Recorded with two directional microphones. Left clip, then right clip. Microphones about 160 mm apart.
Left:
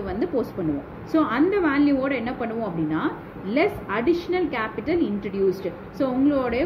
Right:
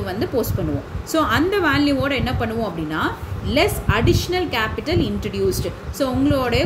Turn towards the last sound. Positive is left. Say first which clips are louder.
# right 3 dB
turn(degrees=-70)  # may be behind; listen again after turning